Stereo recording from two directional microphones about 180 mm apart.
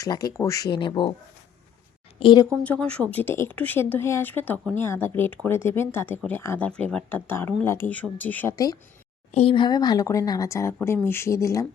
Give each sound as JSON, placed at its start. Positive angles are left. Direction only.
{"t": 0.0, "sound": "speech", "side_deg": 20}
{"t": 2.1, "sound": "a sound", "side_deg": 30}
{"t": 2.6, "sound": "speech", "side_deg": 5}
{"t": 9.3, "sound": "speech", "side_deg": 30}